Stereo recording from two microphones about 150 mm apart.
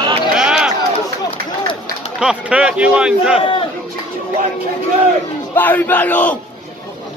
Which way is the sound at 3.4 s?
35° left (ahead or behind).